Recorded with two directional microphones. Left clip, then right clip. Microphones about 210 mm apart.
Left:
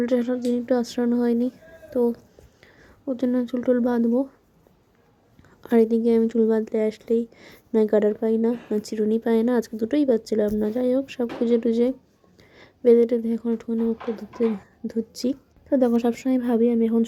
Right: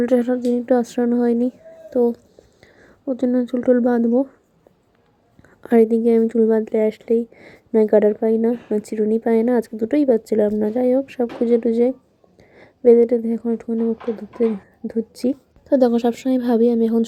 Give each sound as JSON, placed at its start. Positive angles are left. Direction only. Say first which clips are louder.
{"t": 0.0, "sound": "speech", "louder": "right 5 dB", "side_deg": -20}
{"t": 5.6, "sound": "speech", "louder": "right 4 dB", "side_deg": -15}
{"t": 8.5, "sound": "speech", "louder": "right 4 dB", "side_deg": 0}
{"t": 8.8, "sound": "speech", "louder": "right 3 dB", "side_deg": -15}
{"t": 13.7, "sound": "speech", "louder": "right 4 dB", "side_deg": 0}
{"t": 14.8, "sound": "speech", "louder": "right 4 dB", "side_deg": -15}
{"t": 16.6, "sound": "speech", "louder": "right 4 dB", "side_deg": 0}